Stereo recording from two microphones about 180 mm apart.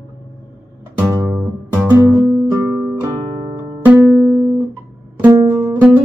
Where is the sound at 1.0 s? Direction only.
15° right (ahead or behind).